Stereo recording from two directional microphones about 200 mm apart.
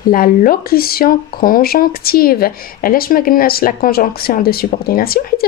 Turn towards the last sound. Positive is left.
turn(degrees=50)  # may be behind; listen again after turning